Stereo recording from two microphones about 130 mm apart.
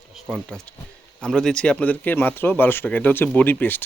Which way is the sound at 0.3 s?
5° left (ahead or behind).